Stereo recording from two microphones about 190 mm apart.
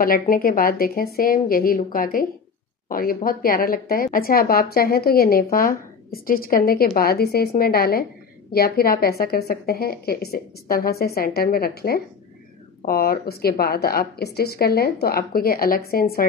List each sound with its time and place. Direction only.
0.0 s speech: 50° left (ahead or behind)